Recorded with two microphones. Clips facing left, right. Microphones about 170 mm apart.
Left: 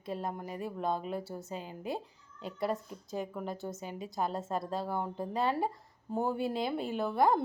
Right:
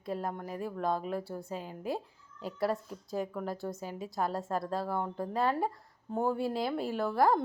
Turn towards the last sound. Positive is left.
turn(degrees=0)  # may be behind; listen again after turning